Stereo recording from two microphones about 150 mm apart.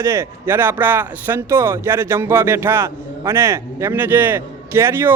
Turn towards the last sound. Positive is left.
turn(degrees=-15)  # may be behind; listen again after turning